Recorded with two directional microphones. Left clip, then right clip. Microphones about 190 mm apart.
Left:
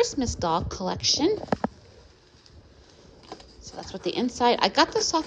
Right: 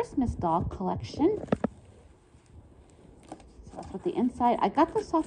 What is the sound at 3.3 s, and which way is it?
Speech, 50° right (ahead or behind).